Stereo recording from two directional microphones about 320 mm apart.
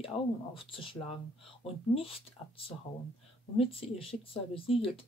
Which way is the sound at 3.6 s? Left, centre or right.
Centre.